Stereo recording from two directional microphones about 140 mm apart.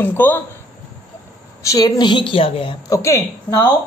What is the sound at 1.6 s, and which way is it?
A woman's voice, 25° left (ahead or behind).